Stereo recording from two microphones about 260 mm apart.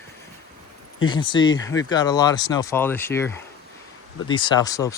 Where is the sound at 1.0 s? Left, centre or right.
Centre.